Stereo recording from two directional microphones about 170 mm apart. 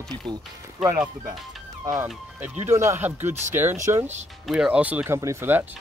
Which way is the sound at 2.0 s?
10° right (ahead or behind).